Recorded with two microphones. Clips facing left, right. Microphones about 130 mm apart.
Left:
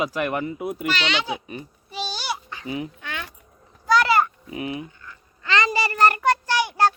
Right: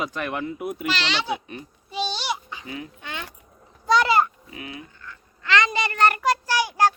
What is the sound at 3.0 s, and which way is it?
Keys jangling, 20° right (ahead or behind).